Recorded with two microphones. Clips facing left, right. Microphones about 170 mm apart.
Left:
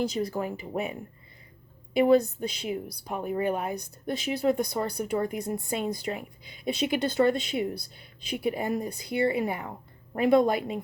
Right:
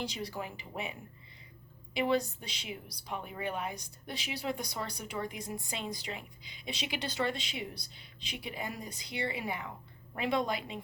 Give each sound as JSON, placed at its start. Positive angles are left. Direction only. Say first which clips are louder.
{"t": 0.0, "sound": "a woman's voice", "louder": "left 10 dB", "side_deg": 50}